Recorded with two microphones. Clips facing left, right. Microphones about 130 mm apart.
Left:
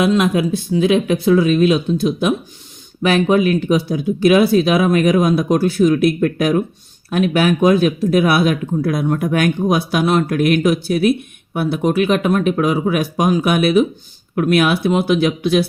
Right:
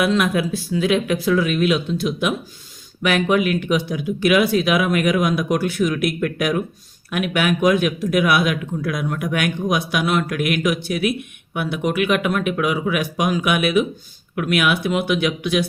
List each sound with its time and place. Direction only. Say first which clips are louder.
0.0 s speech: left 4 dB; 25° left (ahead or behind)